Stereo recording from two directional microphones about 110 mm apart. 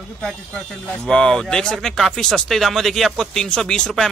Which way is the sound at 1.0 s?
10° left (ahead or behind).